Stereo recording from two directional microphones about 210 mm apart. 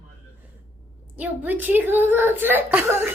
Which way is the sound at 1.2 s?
10° right (ahead or behind).